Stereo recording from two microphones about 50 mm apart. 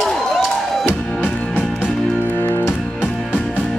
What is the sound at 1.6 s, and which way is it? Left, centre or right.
Music, left.